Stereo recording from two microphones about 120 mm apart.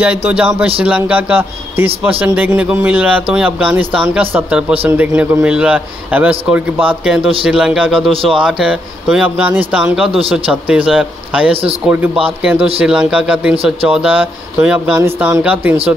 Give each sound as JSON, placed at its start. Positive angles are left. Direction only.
{"t": 0.3, "sound": "speech", "side_deg": -10}
{"t": 8.1, "sound": "speech", "side_deg": -50}
{"t": 8.4, "sound": "speech", "side_deg": -5}
{"t": 12.7, "sound": "speech", "side_deg": -10}